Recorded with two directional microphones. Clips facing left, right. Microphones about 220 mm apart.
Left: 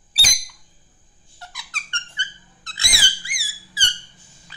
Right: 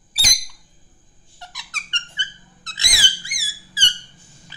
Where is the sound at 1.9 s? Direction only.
20° right (ahead or behind).